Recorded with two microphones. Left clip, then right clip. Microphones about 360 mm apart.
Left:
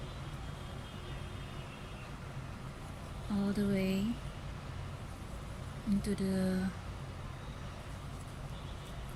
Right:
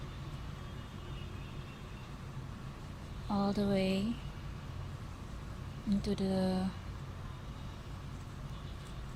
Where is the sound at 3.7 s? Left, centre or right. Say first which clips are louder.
Right 2 dB; centre.